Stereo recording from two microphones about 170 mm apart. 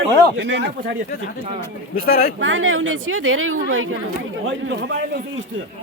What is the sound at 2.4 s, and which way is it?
Speech, 90° right.